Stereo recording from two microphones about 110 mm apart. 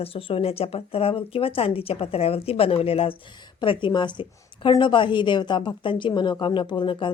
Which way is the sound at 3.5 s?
45° left (ahead or behind).